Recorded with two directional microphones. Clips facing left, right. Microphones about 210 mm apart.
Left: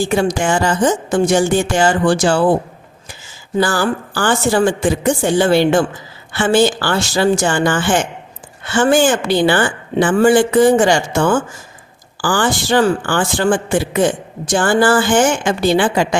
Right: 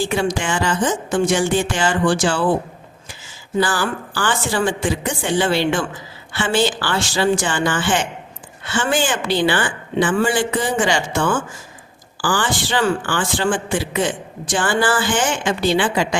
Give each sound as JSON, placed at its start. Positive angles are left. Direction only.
{"t": 0.0, "sound": "a woman's voice", "side_deg": 45}
{"t": 3.6, "sound": "a woman's voice", "side_deg": 45}